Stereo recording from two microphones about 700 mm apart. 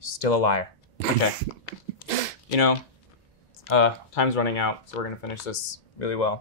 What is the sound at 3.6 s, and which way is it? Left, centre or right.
Speech, left.